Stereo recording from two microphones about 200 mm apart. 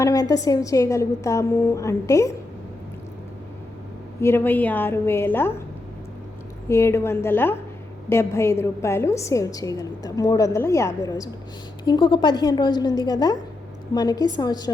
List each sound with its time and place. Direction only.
0.0 s a woman's voice: 20° left (ahead or behind)
4.2 s a woman's voice: 10° left (ahead or behind)
6.7 s a woman's voice: 15° left (ahead or behind)